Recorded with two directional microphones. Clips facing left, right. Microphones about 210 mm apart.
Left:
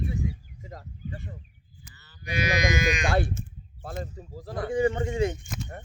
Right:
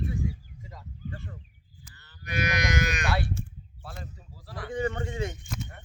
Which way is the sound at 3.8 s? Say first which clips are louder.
Left 8 dB; 45° left (ahead or behind).